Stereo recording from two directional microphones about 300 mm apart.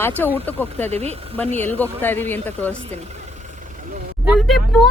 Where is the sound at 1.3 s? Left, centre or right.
Centre.